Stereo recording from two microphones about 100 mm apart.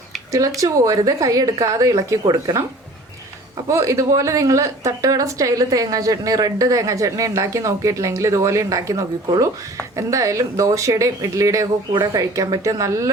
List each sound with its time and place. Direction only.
0.3 s a woman's voice: 35° right (ahead or behind)
3.7 s a woman's voice: 30° right (ahead or behind)
11.9 s a woman's voice: 40° right (ahead or behind)